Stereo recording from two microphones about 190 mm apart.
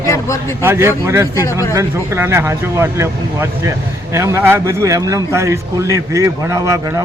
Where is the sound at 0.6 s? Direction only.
15° right (ahead or behind).